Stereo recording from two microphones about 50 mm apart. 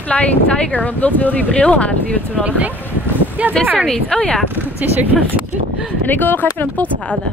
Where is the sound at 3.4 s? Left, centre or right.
Right.